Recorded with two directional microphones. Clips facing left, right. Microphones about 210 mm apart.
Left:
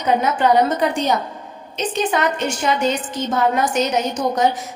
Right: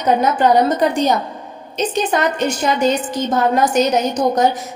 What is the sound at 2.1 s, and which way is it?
A woman's voice, 40° right (ahead or behind).